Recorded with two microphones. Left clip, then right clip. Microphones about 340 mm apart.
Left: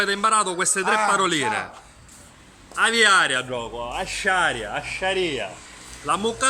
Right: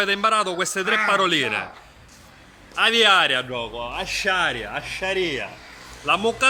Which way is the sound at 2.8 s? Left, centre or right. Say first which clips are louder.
Right 1 dB; centre.